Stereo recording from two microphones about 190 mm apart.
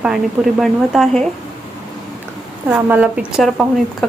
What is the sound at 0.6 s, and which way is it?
Speech, centre (ahead or behind).